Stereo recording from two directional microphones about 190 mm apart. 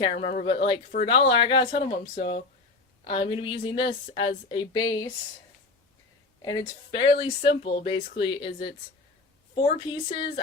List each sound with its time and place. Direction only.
0.0 s a woman's voice: 30° left (ahead or behind)
3.0 s a woman's voice: 25° left (ahead or behind)
6.4 s a woman's voice: 25° left (ahead or behind)